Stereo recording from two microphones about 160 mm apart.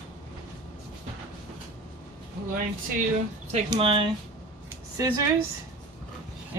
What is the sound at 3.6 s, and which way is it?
Speech, 30° right (ahead or behind).